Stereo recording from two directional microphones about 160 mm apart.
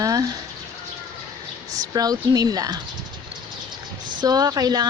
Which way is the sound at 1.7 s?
25° right (ahead or behind).